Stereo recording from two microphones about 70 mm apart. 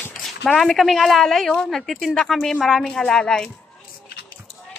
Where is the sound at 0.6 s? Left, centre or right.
Centre.